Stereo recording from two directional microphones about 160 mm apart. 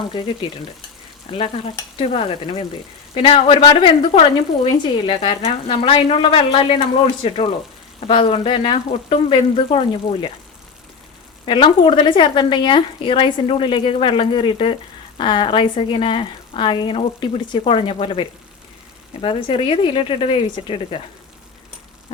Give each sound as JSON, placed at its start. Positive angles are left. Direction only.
{"t": 0.1, "sound": "speech", "side_deg": 30}
{"t": 11.4, "sound": "speech", "side_deg": 30}